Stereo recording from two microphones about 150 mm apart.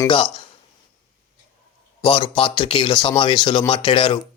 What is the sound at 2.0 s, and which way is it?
Speech, 35° left (ahead or behind).